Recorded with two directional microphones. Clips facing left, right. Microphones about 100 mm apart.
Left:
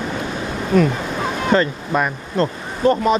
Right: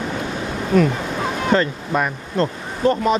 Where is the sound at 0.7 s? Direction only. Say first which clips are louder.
Even; 20° left (ahead or behind).